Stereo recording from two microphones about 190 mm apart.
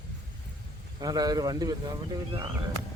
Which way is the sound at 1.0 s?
20° right (ahead or behind).